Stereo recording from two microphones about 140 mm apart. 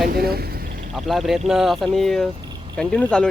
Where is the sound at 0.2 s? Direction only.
90° right.